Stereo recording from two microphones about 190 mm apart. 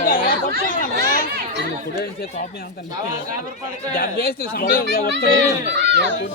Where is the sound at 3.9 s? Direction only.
55° left (ahead or behind).